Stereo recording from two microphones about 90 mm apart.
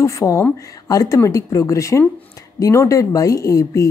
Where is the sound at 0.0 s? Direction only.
35° left (ahead or behind).